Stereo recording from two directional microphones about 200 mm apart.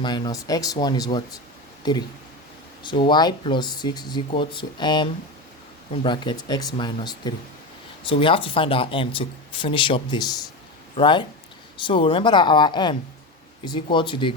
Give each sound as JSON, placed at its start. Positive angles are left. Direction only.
{"t": 0.0, "sound": "speech", "side_deg": 20}